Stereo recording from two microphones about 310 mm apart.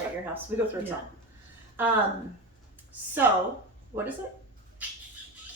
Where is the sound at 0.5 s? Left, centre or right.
Centre.